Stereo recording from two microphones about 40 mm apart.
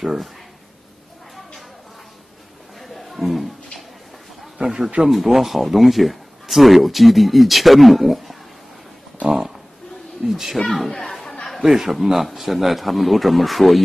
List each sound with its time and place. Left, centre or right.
0.0 s speech: centre
2.8 s music: centre
4.6 s a sound: centre
5.0 s speech: centre
10.2 s speech: centre
10.6 s a woman's voice: centre
11.6 s speech: centre